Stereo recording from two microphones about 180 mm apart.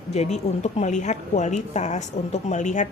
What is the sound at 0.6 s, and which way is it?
A woman's voice, 40° left (ahead or behind).